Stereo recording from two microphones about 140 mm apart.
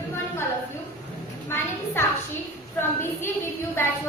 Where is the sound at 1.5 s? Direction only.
20° left (ahead or behind).